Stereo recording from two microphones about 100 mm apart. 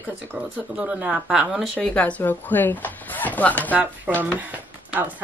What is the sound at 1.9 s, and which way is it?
A woman's voice, 15° left (ahead or behind).